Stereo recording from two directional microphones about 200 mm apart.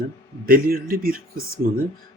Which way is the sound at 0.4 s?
45° right (ahead or behind).